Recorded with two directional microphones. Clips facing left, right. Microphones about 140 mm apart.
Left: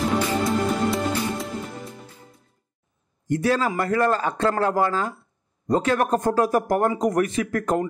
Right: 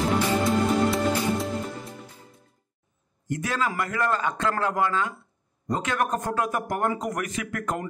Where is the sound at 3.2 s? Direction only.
35° left (ahead or behind).